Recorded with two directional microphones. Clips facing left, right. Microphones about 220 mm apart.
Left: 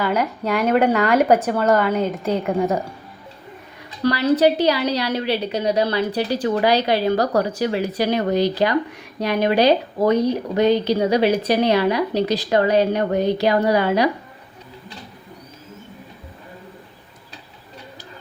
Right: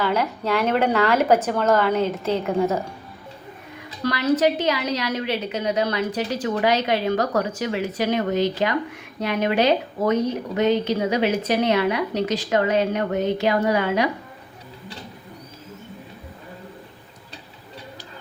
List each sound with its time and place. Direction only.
0.0 s speech: 10° left (ahead or behind)
4.0 s speech: 35° left (ahead or behind)